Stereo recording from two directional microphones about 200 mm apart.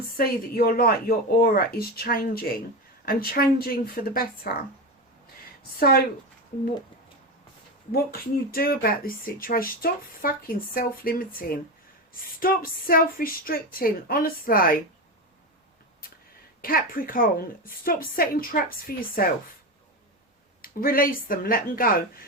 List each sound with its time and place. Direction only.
0.2 s speech: 50° left (ahead or behind)
8.5 s speech: 50° left (ahead or behind)
16.6 s speech: 45° left (ahead or behind)
20.6 s speech: 45° left (ahead or behind)